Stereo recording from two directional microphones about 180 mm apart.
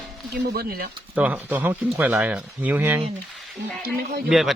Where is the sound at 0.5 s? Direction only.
60° right (ahead or behind).